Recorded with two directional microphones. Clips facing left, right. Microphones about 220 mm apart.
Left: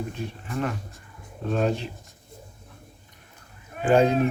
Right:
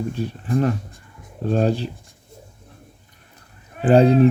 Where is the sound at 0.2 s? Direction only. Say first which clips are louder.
Right 10 dB; 35° right (ahead or behind).